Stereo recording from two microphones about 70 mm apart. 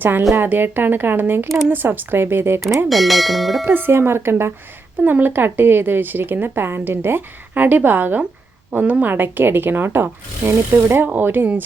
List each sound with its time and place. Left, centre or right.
0.0 s speech: right
2.7 s speech: centre
3.7 s speech: right